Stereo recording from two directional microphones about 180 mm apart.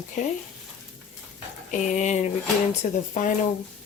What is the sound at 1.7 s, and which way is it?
Speech, 40° left (ahead or behind).